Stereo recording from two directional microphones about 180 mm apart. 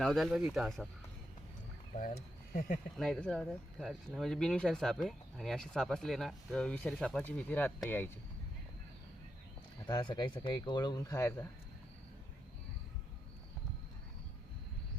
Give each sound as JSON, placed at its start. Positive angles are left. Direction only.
{"t": 0.0, "sound": "speech", "side_deg": 0}
{"t": 2.0, "sound": "speech", "side_deg": 50}
{"t": 2.9, "sound": "speech", "side_deg": 5}
{"t": 9.8, "sound": "speech", "side_deg": 25}